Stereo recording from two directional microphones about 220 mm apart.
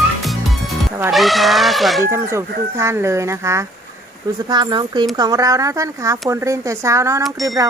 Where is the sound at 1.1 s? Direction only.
Centre (ahead or behind).